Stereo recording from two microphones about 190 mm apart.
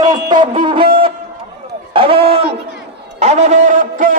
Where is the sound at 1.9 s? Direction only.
30° right (ahead or behind); by 4.1 s 45° right (ahead or behind).